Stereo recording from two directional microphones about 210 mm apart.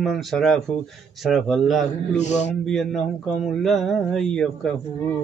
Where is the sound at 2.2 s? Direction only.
35° left (ahead or behind).